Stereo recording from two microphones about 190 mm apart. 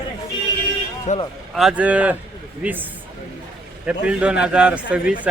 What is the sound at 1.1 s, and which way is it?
Speech, 40° left (ahead or behind).